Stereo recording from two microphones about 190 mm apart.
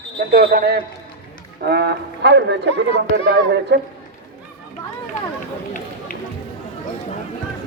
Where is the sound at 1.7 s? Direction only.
60° right (ahead or behind).